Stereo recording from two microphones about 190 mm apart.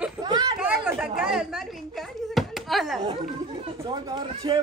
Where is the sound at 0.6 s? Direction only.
5° right (ahead or behind).